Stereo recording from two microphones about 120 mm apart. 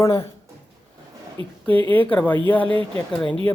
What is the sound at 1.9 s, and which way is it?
Speech, 15° left (ahead or behind).